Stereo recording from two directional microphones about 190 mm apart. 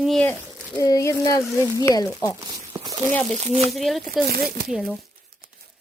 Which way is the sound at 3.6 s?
Centre (ahead or behind).